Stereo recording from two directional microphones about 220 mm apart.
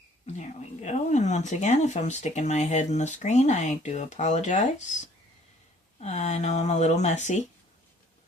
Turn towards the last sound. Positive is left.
turn(degrees=30)  # may be behind; listen again after turning